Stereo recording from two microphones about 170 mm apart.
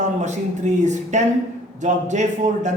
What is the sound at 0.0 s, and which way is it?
A man's voice, 45° right (ahead or behind).